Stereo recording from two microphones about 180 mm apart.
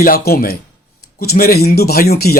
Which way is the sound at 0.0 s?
55° left (ahead or behind).